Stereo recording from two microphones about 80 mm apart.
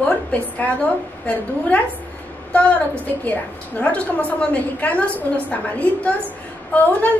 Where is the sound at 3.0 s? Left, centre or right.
Centre.